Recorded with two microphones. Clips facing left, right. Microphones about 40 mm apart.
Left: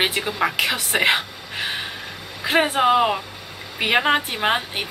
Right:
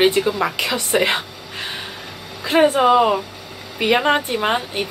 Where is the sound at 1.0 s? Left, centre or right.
Centre.